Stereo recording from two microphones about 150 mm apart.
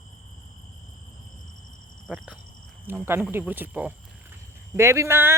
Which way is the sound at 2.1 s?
10° right (ahead or behind).